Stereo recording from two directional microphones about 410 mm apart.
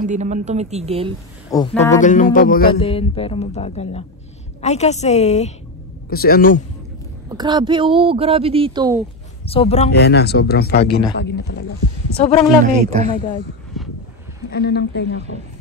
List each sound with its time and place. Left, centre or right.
0.0 s speech: centre
1.5 s speech: centre
2.0 s speech: centre
7.2 s speech: centre
9.5 s speech: centre
12.2 s speech: centre
12.9 s speech: centre
13.7 s vehicle: centre
14.5 s speech: left